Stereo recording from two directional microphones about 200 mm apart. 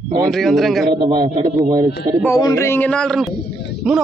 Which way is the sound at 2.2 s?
15° left (ahead or behind).